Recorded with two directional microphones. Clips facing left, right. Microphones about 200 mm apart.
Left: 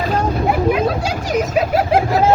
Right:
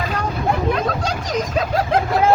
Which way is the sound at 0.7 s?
10° left (ahead or behind).